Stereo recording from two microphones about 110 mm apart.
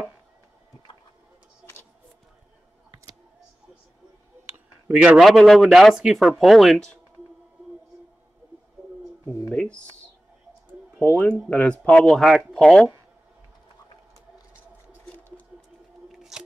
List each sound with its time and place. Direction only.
4.8 s speech: 10° right (ahead or behind)
9.5 s speech: 10° left (ahead or behind)
11.1 s speech: 15° left (ahead or behind); by 12.8 s centre (ahead or behind)
16.1 s squish: 5° right (ahead or behind)